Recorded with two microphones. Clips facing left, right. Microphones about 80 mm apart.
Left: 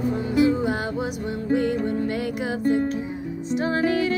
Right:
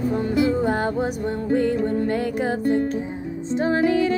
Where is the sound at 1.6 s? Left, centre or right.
Right.